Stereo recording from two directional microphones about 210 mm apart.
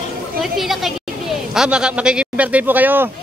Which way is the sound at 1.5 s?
5° right (ahead or behind).